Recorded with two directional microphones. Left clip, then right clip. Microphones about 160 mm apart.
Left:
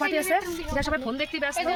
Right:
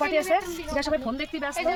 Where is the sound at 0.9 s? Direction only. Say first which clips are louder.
Even; 80° right; by 1.5 s 60° right (ahead or behind).